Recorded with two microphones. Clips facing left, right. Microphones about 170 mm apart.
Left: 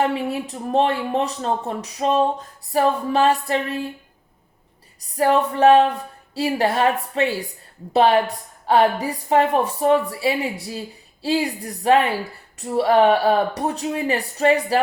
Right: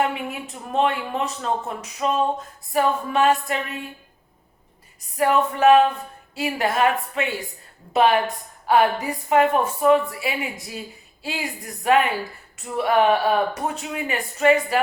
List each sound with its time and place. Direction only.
0.0 s a woman's voice: 35° left (ahead or behind)
5.1 s a woman's voice: 35° left (ahead or behind)